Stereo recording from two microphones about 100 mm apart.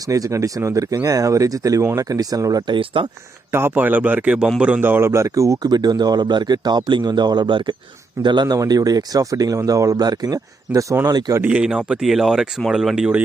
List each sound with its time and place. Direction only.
0.1 s a man's voice: 35° right (ahead or behind)
2.7 s speech: 60° right (ahead or behind)
3.5 s a man's voice: 20° right (ahead or behind); by 8.5 s 50° right (ahead or behind)
8.5 s a man's voice: 40° right (ahead or behind)
11.4 s speech: 10° right (ahead or behind)